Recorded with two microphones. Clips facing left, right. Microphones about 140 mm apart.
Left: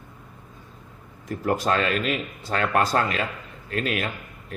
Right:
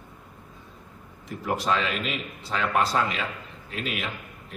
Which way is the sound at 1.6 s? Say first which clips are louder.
Left 1 dB; 45° left (ahead or behind).